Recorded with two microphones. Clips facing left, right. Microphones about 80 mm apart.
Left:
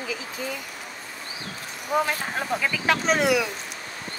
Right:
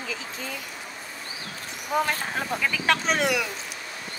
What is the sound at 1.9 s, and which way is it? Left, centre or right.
Speech, centre.